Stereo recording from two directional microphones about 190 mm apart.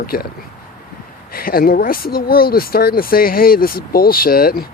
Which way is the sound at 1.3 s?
50° left (ahead or behind).